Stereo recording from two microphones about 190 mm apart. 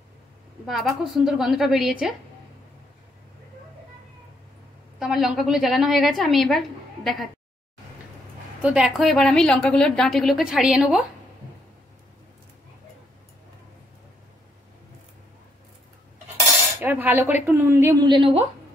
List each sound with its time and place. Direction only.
0.7 s a woman's voice: centre (ahead or behind)
4.9 s a woman's voice: centre (ahead or behind)
8.6 s a woman's voice: 5° right (ahead or behind)
16.8 s speech: 10° right (ahead or behind)
18.0 s a woman's voice: 25° right (ahead or behind)